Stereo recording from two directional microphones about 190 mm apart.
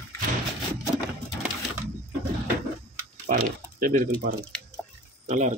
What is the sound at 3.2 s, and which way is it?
Pig, 45° right (ahead or behind).